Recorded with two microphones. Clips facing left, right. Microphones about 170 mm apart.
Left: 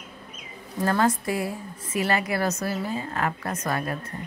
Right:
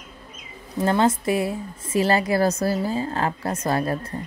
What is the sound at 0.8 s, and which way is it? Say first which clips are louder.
A woman's voice: right 3 dB; 20° right (ahead or behind).